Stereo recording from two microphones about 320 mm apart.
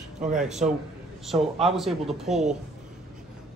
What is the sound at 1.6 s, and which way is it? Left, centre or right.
Speech, centre.